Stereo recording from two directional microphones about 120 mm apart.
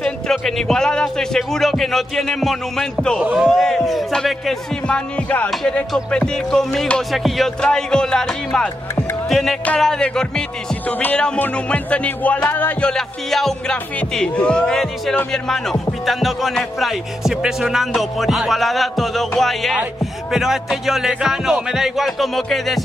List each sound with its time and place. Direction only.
0.0 s speech: 5° left (ahead or behind)
10.9 s music: 15° left (ahead or behind)
12.9 s speech: centre (ahead or behind)